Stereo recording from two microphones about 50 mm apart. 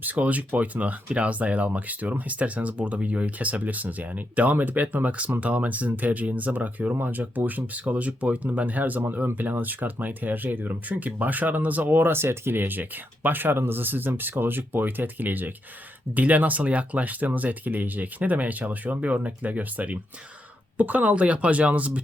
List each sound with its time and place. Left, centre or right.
0.0 s speech: right